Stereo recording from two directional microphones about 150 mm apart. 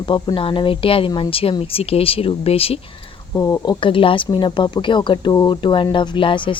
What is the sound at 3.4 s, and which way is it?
A woman's voice, 25° left (ahead or behind).